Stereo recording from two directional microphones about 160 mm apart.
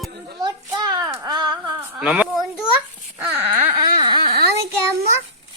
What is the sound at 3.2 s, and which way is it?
Baby cry, 10° right (ahead or behind).